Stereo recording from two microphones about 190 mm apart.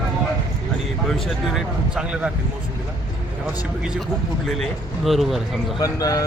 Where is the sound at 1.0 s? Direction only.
Centre (ahead or behind).